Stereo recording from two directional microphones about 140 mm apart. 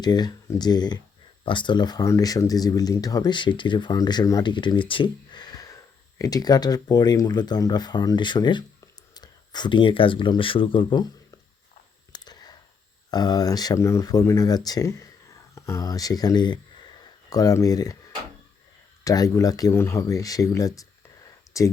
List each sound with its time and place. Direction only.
0.0 s speech: 30° left (ahead or behind)
12.1 s a sound: 30° left (ahead or behind)
13.1 s speech: 30° left (ahead or behind)
19.0 s speech: 25° left (ahead or behind)